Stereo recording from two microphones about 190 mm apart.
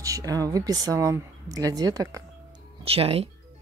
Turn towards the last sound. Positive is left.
turn(degrees=-30)  # may be behind; listen again after turning